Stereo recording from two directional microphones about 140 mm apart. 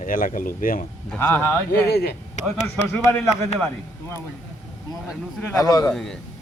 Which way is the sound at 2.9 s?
10° left (ahead or behind).